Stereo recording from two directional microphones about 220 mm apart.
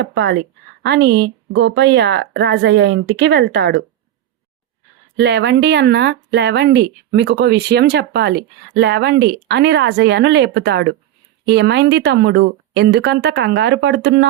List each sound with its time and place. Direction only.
0.0 s speech: 50° right (ahead or behind)
5.1 s speech: 50° right (ahead or behind)